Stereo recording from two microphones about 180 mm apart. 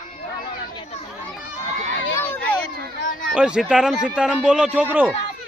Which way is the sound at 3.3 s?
5° right (ahead or behind).